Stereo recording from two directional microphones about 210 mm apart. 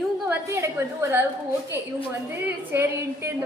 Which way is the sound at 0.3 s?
10° right (ahead or behind).